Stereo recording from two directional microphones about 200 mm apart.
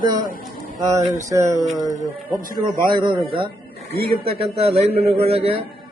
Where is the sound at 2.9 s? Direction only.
25° right (ahead or behind).